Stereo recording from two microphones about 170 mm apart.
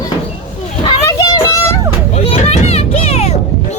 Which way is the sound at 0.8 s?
25° left (ahead or behind).